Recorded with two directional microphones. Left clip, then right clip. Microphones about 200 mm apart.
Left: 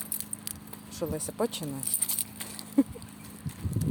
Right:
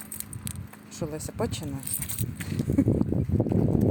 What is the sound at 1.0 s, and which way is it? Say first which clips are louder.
Speech: left 1 dB; 5° right (ahead or behind).